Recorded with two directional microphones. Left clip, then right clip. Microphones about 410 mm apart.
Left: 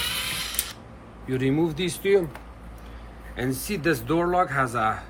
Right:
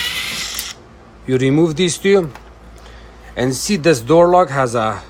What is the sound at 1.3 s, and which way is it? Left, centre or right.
Speech, centre.